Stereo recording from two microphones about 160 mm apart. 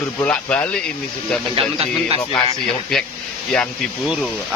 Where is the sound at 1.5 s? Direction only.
35° right (ahead or behind).